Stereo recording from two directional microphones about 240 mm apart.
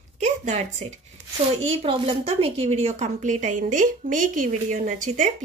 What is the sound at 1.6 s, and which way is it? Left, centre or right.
A woman's voice, right.